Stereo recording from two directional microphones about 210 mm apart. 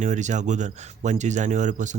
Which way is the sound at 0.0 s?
35° right (ahead or behind).